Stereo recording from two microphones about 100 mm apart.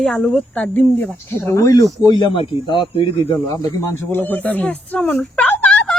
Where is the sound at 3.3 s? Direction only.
40° left (ahead or behind).